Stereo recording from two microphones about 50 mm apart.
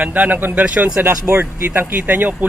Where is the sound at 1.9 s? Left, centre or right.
Right.